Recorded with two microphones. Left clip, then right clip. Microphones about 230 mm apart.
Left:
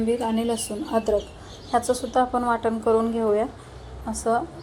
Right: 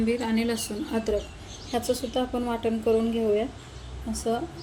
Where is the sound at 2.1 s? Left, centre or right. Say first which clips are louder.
Left 7 dB; centre.